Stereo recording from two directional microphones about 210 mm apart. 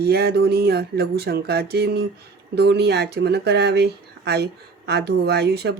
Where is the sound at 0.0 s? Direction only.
50° right (ahead or behind).